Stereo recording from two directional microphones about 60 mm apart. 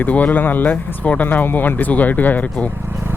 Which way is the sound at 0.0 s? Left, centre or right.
Left.